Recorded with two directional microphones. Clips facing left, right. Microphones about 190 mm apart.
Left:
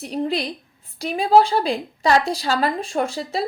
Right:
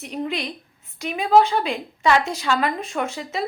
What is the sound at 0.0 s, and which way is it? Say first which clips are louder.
A woman's voice: left 4 dB; 35° left (ahead or behind).